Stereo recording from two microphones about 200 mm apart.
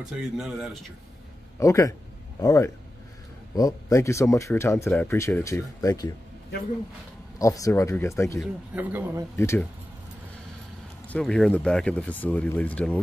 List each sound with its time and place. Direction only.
0.0 s speech: 5° right (ahead or behind)
1.6 s speech: 15° left (ahead or behind)
7.3 s speech: 15° left (ahead or behind)
8.4 s speech: 10° right (ahead or behind)
9.4 s speech: 15° left (ahead or behind)
11.1 s speech: 5° left (ahead or behind)